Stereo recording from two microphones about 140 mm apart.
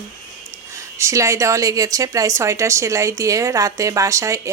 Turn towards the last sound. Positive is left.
turn(degrees=-20)  # may be behind; listen again after turning